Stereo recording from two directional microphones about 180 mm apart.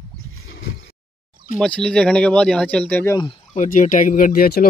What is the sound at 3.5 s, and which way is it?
Speech, 45° left (ahead or behind).